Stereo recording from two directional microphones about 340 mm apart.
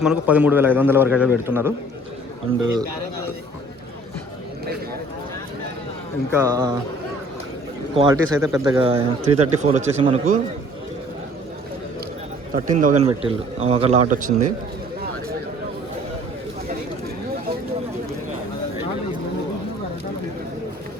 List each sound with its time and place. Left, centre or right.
0.0 s a man's voice: centre
6.3 s speech: centre
7.9 s a man's voice: centre
12.5 s a man's voice: right